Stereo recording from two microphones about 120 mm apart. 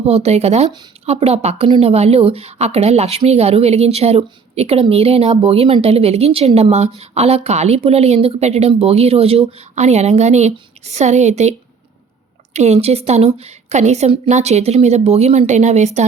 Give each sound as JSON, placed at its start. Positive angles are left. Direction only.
{"t": 0.0, "sound": "speech", "side_deg": -60}
{"t": 12.5, "sound": "speech", "side_deg": -65}